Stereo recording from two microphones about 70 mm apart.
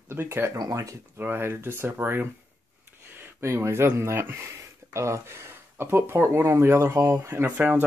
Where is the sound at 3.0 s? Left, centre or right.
Right.